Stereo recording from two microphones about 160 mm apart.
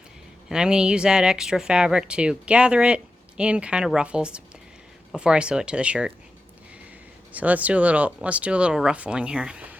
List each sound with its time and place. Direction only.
0.4 s speech: 5° right (ahead or behind)
7.3 s speech: 10° right (ahead or behind)